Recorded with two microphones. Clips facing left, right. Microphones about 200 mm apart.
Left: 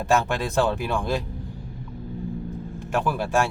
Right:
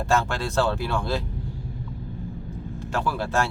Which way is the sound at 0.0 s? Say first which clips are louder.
Left 2 dB; 15° left (ahead or behind).